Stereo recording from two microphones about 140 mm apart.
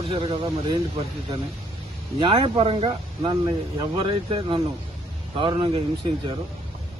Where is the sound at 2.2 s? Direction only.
40° right (ahead or behind).